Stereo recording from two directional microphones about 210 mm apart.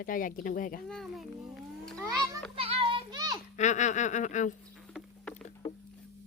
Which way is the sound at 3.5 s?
35° left (ahead or behind).